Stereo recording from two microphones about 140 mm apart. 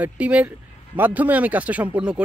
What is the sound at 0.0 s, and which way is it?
Speech, 10° right (ahead or behind).